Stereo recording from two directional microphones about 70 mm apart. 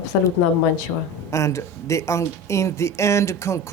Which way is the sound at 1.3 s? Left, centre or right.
Left.